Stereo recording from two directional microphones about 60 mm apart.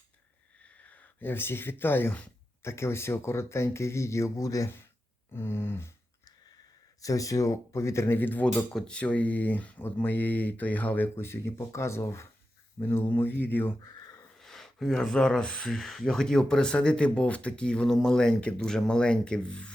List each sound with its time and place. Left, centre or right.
0.9 s a sound: left
1.3 s speech: left
2.6 s speech: left
5.3 s speech: left
7.0 s speech: left
8.2 s speech: left
8.7 s speech: centre; by 13.7 s left
13.8 s a sound: left
14.3 s speech: centre